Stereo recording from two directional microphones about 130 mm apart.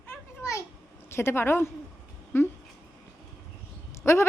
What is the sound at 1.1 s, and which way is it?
A woman's voice, 20° left (ahead or behind).